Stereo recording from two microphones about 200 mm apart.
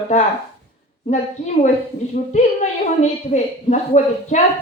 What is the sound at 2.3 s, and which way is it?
A woman's voice, 35° left (ahead or behind).